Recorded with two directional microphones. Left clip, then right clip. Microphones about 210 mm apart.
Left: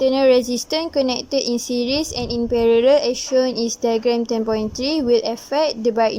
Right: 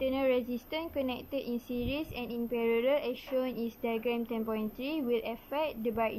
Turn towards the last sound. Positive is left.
turn(degrees=45)  # may be behind; listen again after turning